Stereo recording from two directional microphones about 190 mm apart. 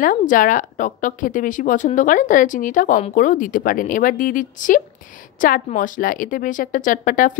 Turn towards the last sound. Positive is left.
turn(degrees=45)  # may be behind; listen again after turning